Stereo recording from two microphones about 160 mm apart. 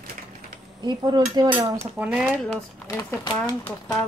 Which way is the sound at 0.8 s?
25° right (ahead or behind).